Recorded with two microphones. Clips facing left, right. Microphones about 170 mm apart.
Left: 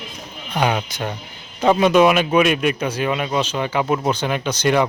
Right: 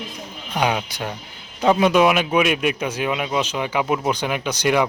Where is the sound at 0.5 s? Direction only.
10° right (ahead or behind).